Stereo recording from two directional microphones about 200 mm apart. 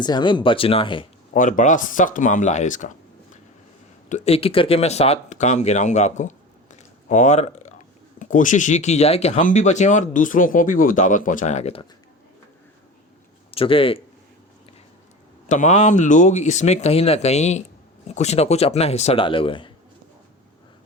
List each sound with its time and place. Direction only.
0.0 s speech: 20° left (ahead or behind)
1.3 s speech: 40° left (ahead or behind)
4.1 s speech: 30° left (ahead or behind)
13.5 s speech: 25° left (ahead or behind)
15.4 s speech: 35° left (ahead or behind)